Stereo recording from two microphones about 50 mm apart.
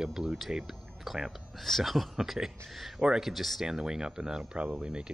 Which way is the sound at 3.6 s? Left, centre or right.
Centre.